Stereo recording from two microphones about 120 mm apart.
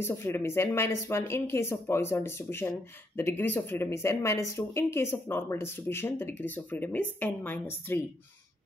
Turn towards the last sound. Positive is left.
turn(degrees=15)  # may be behind; listen again after turning